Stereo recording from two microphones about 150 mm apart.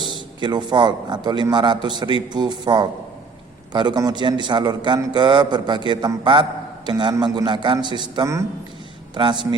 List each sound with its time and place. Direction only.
0.0 s a man's voice: 30° right (ahead or behind)